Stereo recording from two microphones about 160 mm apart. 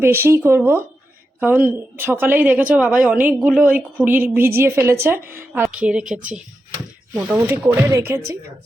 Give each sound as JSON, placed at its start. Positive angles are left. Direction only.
{"t": 0.0, "sound": "a woman's voice", "side_deg": -15}